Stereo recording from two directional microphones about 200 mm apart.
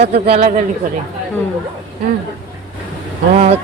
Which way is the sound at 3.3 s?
35° right (ahead or behind).